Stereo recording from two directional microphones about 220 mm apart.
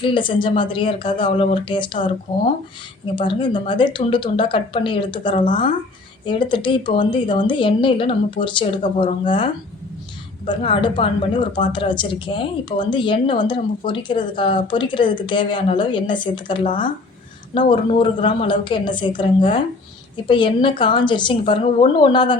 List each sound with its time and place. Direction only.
0.0 s a woman's voice: 20° left (ahead or behind)